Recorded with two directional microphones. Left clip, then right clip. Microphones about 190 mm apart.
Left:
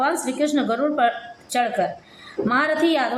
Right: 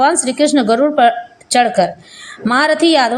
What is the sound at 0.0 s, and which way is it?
A woman's voice, 35° right (ahead or behind).